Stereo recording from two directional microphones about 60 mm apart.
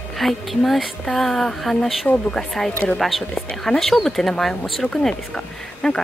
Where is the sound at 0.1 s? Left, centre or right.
Centre.